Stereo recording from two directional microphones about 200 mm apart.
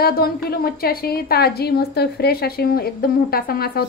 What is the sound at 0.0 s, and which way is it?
A woman's voice, 50° left (ahead or behind).